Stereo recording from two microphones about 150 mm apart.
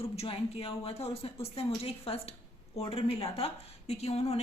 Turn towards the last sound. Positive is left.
turn(degrees=45)  # may be behind; listen again after turning